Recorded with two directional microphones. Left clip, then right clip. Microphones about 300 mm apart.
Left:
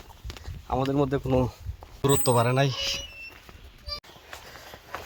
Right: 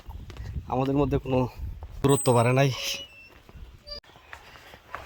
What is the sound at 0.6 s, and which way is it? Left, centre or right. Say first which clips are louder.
Speech: even; centre.